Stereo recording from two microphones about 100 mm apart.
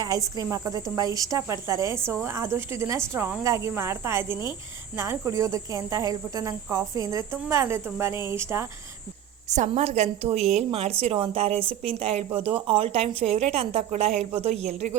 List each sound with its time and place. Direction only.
0.0 s a woman's voice: 35° right (ahead or behind)
9.8 s a woman's voice: 90° right